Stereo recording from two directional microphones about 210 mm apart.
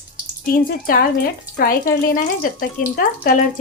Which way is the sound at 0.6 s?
45° left (ahead or behind).